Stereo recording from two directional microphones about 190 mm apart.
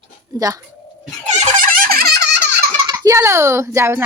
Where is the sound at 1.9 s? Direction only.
55° right (ahead or behind).